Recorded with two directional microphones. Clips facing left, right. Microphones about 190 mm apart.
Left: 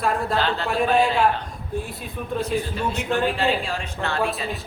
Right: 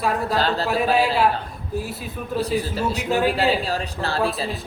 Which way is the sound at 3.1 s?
5° right (ahead or behind).